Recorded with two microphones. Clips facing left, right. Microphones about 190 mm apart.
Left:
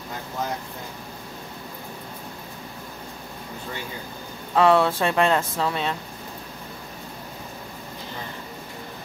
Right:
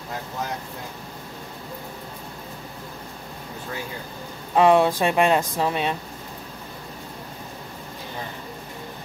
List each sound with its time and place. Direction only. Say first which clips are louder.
4.6 s speech: right 2 dB; 15° right (ahead or behind)